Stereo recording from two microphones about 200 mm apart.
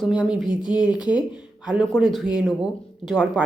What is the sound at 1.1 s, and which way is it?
Speech, 5° right (ahead or behind).